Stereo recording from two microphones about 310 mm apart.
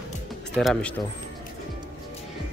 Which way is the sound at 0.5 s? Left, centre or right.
Centre.